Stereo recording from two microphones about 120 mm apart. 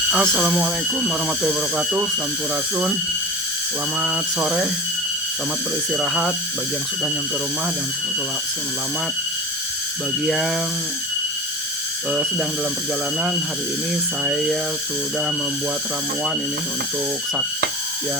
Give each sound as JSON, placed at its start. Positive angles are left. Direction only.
{"t": 0.1, "sound": "speech", "side_deg": -10}
{"t": 4.0, "sound": "speech", "side_deg": -10}
{"t": 5.9, "sound": "speech", "side_deg": -5}
{"t": 10.2, "sound": "speech", "side_deg": 0}
{"t": 14.3, "sound": "speech", "side_deg": 0}